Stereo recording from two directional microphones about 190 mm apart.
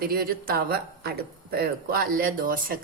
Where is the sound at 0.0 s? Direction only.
50° right (ahead or behind).